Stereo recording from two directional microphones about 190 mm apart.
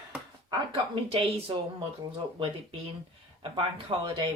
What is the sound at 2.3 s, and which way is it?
Speech, 30° right (ahead or behind).